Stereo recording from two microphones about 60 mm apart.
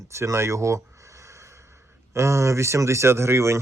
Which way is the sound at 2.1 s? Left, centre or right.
Right.